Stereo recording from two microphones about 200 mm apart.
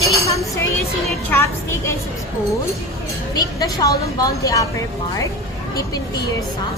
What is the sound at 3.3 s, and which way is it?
A woman's voice, 15° left (ahead or behind).